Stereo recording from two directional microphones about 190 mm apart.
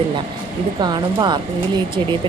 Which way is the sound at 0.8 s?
20° right (ahead or behind).